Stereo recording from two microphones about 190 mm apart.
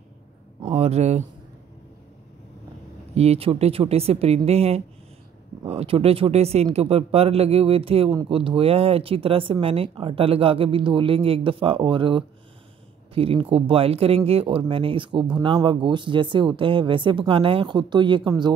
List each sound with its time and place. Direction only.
0.6 s speech: 30° right (ahead or behind)
3.2 s a man's voice: 30° right (ahead or behind)